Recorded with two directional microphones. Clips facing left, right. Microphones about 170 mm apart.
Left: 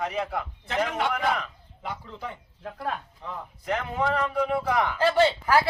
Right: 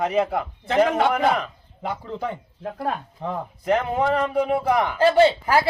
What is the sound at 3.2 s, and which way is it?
Speech, 85° right.